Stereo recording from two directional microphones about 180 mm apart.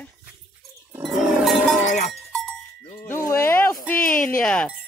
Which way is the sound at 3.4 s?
15° left (ahead or behind).